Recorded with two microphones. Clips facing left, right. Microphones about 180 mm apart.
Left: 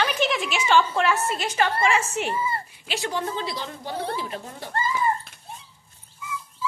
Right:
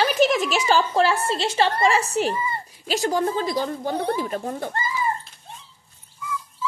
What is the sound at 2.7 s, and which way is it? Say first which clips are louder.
Speech: right 6 dB; 40° right (ahead or behind).